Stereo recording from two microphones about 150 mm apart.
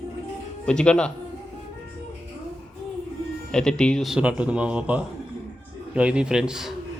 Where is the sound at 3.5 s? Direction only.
5° left (ahead or behind).